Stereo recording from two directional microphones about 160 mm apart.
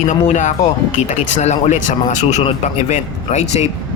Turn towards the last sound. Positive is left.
turn(degrees=45)  # may be behind; listen again after turning